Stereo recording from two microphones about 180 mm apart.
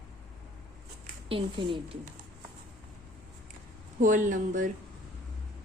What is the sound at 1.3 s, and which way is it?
Speech, 25° right (ahead or behind).